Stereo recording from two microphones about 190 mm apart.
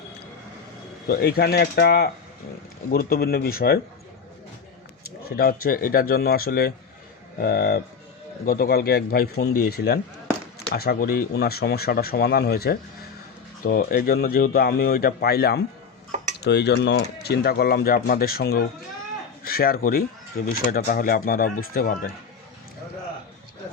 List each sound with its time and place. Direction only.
1.0 s speech: 55° left (ahead or behind)
5.2 s speech: 50° left (ahead or behind)